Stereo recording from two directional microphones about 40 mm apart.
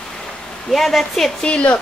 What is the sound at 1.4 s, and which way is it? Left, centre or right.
Speech, left.